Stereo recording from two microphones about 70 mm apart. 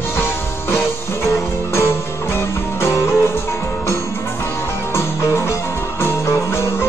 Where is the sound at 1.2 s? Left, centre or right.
Left.